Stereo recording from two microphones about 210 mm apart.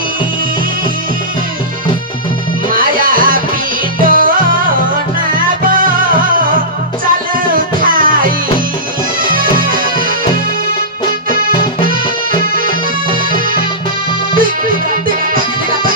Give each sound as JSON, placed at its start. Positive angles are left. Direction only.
{"t": 2.7, "sound": "music", "side_deg": -40}
{"t": 7.5, "sound": "music", "side_deg": -40}
{"t": 9.2, "sound": "music", "side_deg": -40}
{"t": 14.3, "sound": "music", "side_deg": -40}